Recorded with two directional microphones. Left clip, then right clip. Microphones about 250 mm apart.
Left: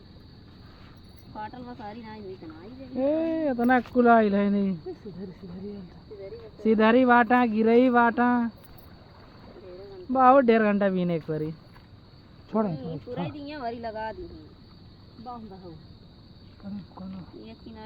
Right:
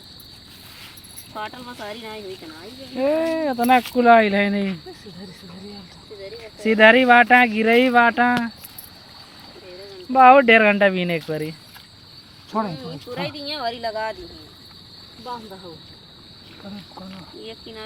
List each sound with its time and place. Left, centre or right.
1.4 s speech: centre
2.9 s speech: centre
6.6 s speech: centre
10.1 s speech: centre
12.6 s speech: centre
13.9 s speech: centre